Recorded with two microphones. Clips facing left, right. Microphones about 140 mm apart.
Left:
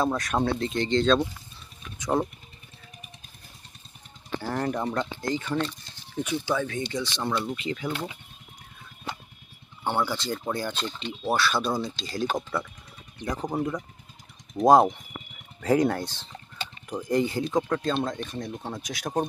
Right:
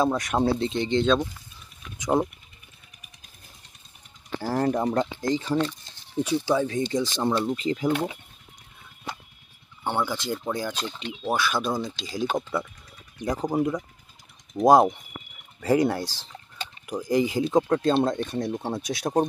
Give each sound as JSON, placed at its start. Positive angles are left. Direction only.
{"t": 0.0, "sound": "speech", "side_deg": -15}
{"t": 0.5, "sound": "speech", "side_deg": -30}
{"t": 0.7, "sound": "speech", "side_deg": -15}
{"t": 4.6, "sound": "speech", "side_deg": -25}
{"t": 9.9, "sound": "speech", "side_deg": -15}
{"t": 10.4, "sound": "speech", "side_deg": -5}
{"t": 12.0, "sound": "speech", "side_deg": -5}
{"t": 17.5, "sound": "speech", "side_deg": -30}